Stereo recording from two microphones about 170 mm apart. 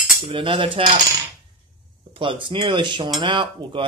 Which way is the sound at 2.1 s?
30° right (ahead or behind).